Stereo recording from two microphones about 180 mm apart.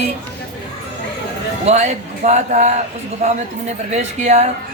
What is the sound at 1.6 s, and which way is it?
A woman's voice, 40° right (ahead or behind).